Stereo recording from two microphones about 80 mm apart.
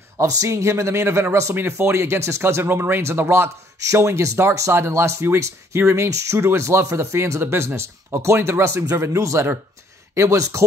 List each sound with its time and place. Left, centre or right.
0.2 s speech: right
3.9 s speech: right